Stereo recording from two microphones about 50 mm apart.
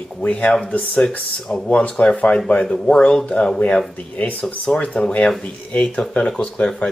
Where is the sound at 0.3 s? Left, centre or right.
Left.